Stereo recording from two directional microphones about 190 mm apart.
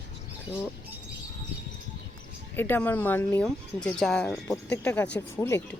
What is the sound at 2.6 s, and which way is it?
Speech, 10° left (ahead or behind).